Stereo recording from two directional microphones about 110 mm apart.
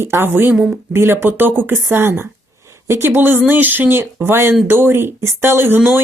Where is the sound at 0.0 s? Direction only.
20° right (ahead or behind).